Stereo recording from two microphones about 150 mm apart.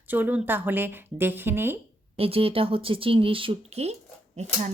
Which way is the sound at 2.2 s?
40° right (ahead or behind).